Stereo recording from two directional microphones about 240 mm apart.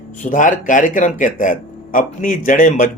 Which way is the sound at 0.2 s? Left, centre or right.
Left.